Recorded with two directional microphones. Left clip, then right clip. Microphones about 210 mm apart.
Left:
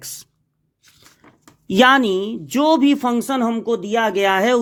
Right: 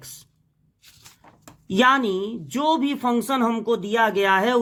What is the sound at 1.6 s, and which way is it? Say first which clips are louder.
Speech: left 5 dB; 35° left (ahead or behind).